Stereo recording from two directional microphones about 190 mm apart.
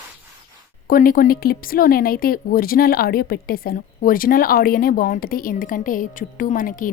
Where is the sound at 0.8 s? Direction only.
50° left (ahead or behind).